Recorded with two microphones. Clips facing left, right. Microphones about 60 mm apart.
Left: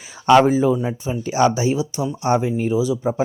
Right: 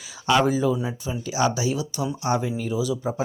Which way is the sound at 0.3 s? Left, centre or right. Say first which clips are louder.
Left 7 dB; left.